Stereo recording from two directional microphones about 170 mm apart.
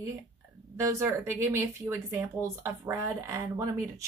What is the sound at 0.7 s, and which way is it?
A woman's voice, 15° right (ahead or behind).